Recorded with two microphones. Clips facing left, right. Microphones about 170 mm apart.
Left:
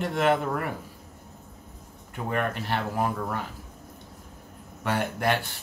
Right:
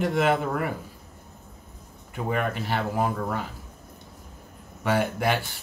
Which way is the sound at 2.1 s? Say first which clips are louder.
Right 1 dB; 5° right (ahead or behind).